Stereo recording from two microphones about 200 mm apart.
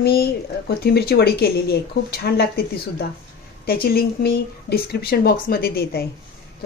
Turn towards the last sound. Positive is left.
turn(degrees=50)  # may be behind; listen again after turning